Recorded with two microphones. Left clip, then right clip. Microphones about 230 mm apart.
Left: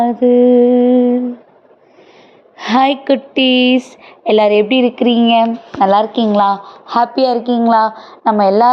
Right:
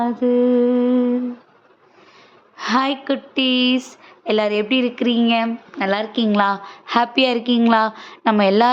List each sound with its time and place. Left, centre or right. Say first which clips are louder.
0.0 s mantra: left 7 dB; centre
2.6 s a woman's voice: left 7 dB; centre
7.3 s a woman's voice: left 5 dB; right